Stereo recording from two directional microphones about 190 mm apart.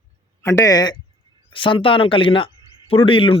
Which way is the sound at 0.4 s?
15° left (ahead or behind).